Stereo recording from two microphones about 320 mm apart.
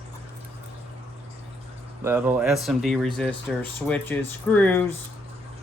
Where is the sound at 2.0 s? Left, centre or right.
Centre.